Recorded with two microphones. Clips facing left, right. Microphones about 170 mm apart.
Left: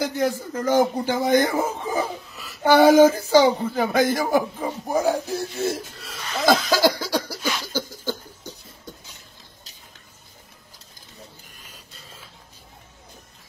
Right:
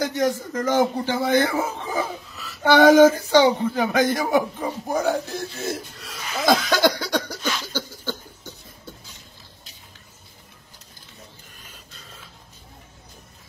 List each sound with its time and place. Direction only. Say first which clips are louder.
0.0 s speech: right 1 dB; 10° left (ahead or behind)
6.2 s cough: left 1 dB; 5° right (ahead or behind)
7.5 s a sound: left 1 dB; 15° left (ahead or behind)